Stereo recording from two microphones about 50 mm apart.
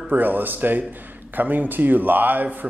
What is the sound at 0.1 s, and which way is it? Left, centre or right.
A man's voice, right.